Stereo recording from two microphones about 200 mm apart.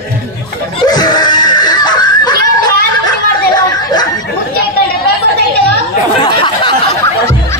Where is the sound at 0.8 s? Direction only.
20° left (ahead or behind).